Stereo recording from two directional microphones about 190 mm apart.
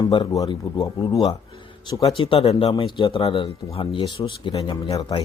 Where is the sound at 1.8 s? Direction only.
20° left (ahead or behind).